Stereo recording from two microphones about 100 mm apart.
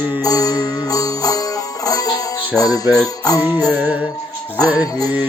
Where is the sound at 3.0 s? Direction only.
40° left (ahead or behind).